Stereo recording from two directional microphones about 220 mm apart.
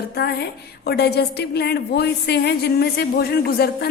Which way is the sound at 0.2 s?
45° left (ahead or behind).